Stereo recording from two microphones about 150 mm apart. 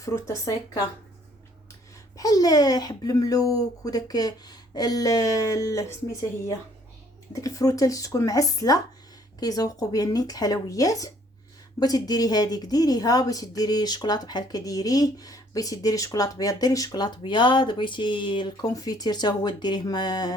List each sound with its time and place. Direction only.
0.0 s speech: 20° left (ahead or behind)
2.1 s speech: 25° left (ahead or behind)